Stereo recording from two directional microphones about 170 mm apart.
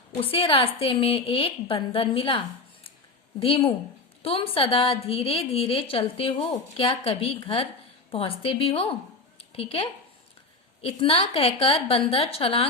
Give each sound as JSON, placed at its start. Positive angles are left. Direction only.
{"t": 0.2, "sound": "a woman's voice", "side_deg": 35}
{"t": 3.4, "sound": "a woman's voice", "side_deg": 35}